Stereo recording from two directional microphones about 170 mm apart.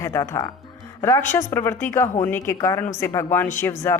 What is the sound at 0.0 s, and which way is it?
A woman's voice, 20° left (ahead or behind).